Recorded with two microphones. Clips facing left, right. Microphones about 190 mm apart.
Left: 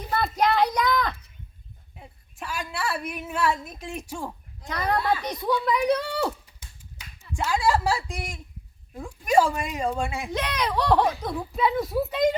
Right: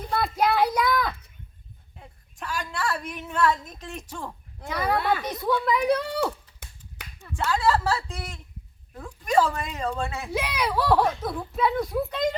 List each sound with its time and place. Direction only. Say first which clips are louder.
0.1 s a child's voice: even; 5° right (ahead or behind)
2.0 s a woman's voice: left 1 dB; 5° left (ahead or behind)
4.7 s speech: even; 5° right (ahead or behind)
6.6 s finger snapping: right 3 dB; 60° right (ahead or behind)
7.3 s a woman's voice: even; 10° left (ahead or behind)
10.3 s speech: right 1 dB; 10° right (ahead or behind)